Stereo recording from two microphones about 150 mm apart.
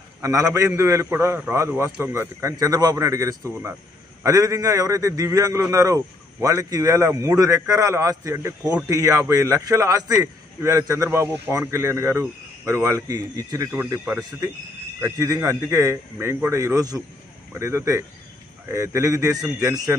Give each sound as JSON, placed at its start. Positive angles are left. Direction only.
{"t": 0.2, "sound": "a man's voice", "side_deg": -20}
{"t": 13.7, "sound": "speech", "side_deg": -15}
{"t": 15.0, "sound": "a man's voice", "side_deg": -20}